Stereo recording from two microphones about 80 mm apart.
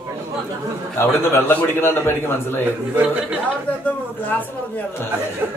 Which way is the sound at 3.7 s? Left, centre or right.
Centre.